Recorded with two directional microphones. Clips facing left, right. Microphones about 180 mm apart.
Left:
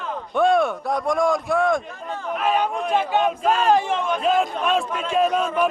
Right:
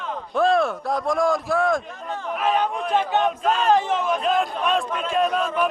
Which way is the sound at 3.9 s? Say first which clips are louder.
Left 1 dB; 5° right (ahead or behind).